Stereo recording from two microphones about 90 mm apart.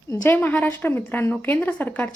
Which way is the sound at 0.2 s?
20° left (ahead or behind).